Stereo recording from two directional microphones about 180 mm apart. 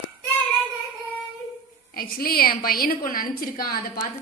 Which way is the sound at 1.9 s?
55° left (ahead or behind).